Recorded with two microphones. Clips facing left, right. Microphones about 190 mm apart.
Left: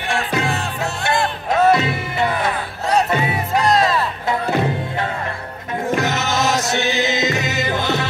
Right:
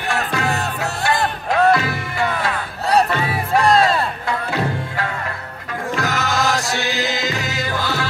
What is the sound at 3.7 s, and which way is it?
Music, 30° right (ahead or behind).